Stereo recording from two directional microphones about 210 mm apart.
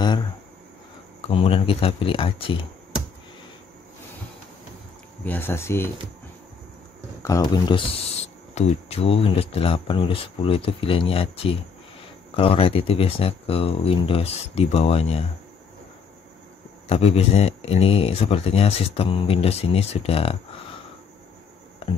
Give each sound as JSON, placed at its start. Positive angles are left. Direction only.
{"t": 1.2, "sound": "speech", "side_deg": 25}
{"t": 5.2, "sound": "speech", "side_deg": 10}
{"t": 7.2, "sound": "speech", "side_deg": 15}
{"t": 16.9, "sound": "speech", "side_deg": 30}